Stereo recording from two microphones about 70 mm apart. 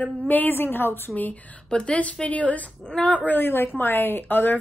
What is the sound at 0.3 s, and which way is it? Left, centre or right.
A woman's voice, left.